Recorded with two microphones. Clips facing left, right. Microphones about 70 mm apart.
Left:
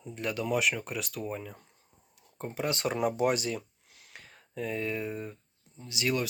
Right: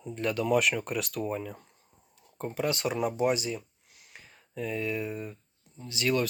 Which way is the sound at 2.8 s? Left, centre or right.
Left.